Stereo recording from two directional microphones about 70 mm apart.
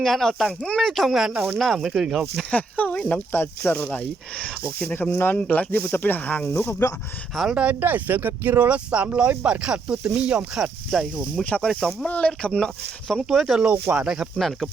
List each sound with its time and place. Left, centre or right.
0.0 s speech: centre
2.5 s speech: left
3.3 s speech: left
6.4 s speech: left
7.5 s speech: centre
11.3 s speech: centre
13.2 s speech: centre